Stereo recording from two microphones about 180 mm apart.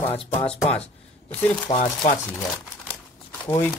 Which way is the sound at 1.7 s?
35° left (ahead or behind).